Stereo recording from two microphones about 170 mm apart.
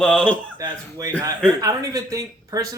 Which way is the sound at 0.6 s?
20° right (ahead or behind).